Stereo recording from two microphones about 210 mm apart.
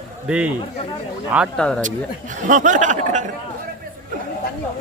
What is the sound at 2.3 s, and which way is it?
Speech, 35° right (ahead or behind).